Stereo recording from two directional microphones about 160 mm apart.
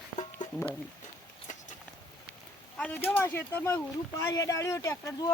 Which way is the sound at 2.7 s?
10° left (ahead or behind).